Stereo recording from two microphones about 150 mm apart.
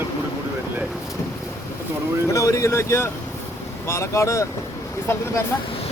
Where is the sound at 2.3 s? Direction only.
20° left (ahead or behind).